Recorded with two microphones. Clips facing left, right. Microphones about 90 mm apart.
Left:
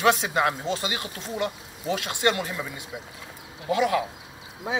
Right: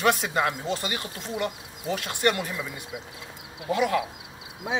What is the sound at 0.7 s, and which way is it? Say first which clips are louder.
Speech: left 1 dB; 90° left.